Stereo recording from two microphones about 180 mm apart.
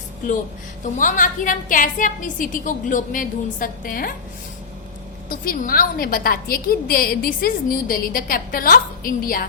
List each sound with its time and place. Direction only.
0.9 s a woman's voice: 45° left (ahead or behind)
5.3 s a woman's voice: 55° left (ahead or behind)